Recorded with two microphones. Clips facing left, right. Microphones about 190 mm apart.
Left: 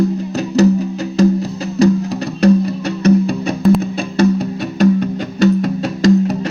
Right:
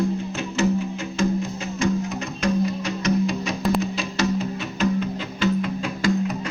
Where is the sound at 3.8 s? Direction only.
55° left (ahead or behind).